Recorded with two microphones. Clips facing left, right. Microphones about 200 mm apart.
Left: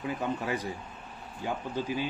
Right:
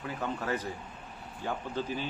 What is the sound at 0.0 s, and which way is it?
Speech, 15° left (ahead or behind).